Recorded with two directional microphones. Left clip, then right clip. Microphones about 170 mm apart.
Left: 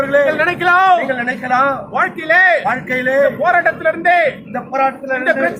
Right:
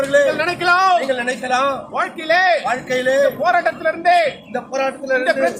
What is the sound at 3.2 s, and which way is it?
A man's voice, 10° right (ahead or behind).